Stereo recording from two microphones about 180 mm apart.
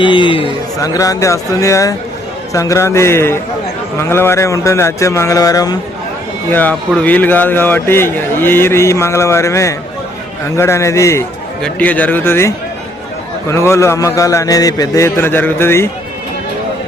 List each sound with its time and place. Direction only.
0.0 s speech: 25° left (ahead or behind)
6.5 s speech: 10° left (ahead or behind)